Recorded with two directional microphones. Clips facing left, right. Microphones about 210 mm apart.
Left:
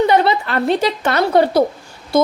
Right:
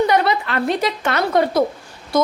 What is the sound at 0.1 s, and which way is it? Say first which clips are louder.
A woman's voice: left 3 dB; 30° left (ahead or behind).